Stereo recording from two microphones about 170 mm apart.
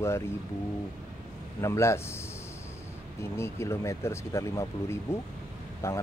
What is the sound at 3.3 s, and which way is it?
Speech, 15° left (ahead or behind).